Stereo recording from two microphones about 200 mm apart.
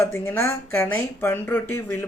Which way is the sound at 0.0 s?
10° left (ahead or behind).